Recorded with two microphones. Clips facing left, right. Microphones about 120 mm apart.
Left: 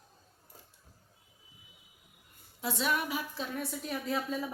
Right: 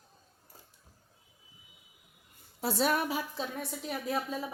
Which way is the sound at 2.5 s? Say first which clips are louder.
Right 3 dB; 40° right (ahead or behind).